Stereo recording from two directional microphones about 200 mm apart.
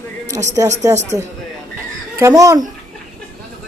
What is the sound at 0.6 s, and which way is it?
Speech, 15° right (ahead or behind).